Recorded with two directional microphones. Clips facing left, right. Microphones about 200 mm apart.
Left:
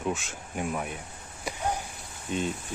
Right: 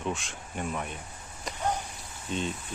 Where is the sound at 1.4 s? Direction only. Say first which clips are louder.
Even; 10° left (ahead or behind).